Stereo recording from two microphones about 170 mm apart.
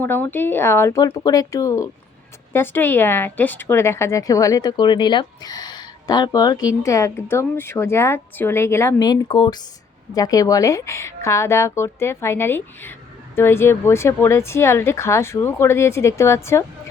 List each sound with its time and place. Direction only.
0.0 s speech: 10° left (ahead or behind)